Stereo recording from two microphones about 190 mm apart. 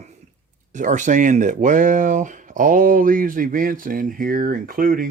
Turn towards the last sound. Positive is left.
turn(degrees=-45)  # may be behind; listen again after turning